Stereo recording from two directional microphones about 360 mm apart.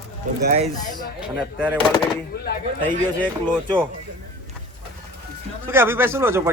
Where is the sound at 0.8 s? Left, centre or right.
Centre.